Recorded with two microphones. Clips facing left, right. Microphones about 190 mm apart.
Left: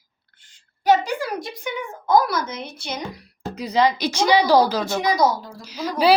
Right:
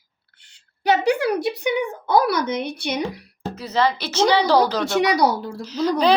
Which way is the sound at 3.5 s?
15° left (ahead or behind).